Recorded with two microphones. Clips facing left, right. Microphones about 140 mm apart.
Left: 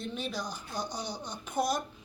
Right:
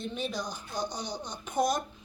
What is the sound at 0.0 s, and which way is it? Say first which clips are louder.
Speech: right 2 dB; centre (ahead or behind).